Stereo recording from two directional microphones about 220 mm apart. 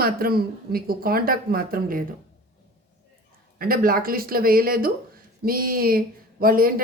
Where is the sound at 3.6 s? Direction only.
40° right (ahead or behind).